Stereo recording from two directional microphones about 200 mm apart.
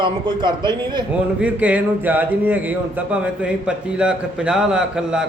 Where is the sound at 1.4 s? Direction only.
5° right (ahead or behind).